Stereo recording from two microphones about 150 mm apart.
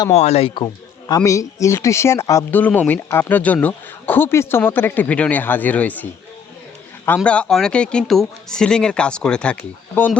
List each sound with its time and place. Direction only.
0.1 s speech: 45° left (ahead or behind)
0.5 s speech: 25° left (ahead or behind); by 6.1 s 10° left (ahead or behind)
7.3 s speech: 5° left (ahead or behind)